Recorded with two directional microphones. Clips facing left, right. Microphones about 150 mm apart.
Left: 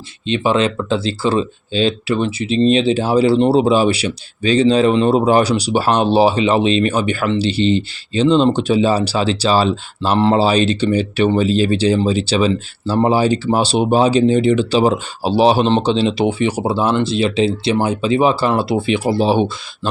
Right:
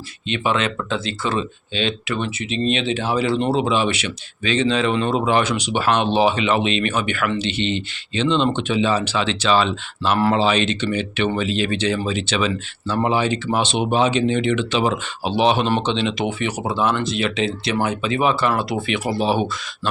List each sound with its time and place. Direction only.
0.3 s speech: 30° left (ahead or behind)
10.2 s speech: 25° left (ahead or behind)
10.4 s speech: 35° left (ahead or behind)